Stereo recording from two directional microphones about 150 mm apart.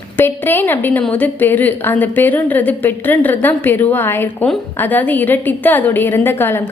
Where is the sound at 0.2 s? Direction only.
15° left (ahead or behind).